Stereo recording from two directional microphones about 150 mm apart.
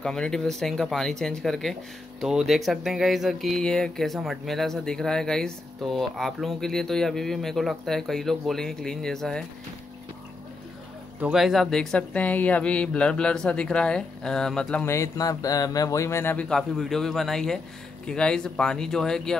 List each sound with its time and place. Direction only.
0.0 s speech: 5° left (ahead or behind)
11.1 s speech: 5° right (ahead or behind)
14.9 s speech: 20° left (ahead or behind)
16.4 s speech: centre (ahead or behind)